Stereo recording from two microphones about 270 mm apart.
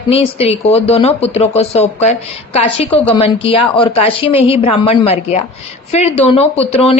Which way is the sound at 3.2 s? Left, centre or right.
Centre.